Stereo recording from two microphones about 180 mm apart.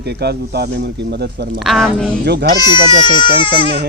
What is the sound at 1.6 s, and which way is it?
Speech, centre (ahead or behind).